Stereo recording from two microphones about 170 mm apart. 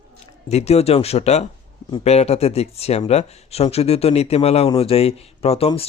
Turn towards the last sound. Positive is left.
turn(degrees=35)  # may be behind; listen again after turning